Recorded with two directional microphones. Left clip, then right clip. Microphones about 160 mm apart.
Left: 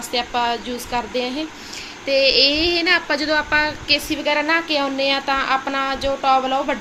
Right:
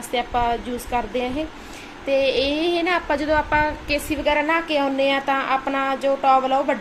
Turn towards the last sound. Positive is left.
turn(degrees=0)  # may be behind; listen again after turning